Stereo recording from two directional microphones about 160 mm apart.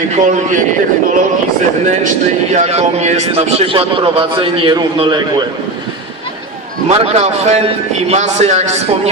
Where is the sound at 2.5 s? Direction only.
40° right (ahead or behind).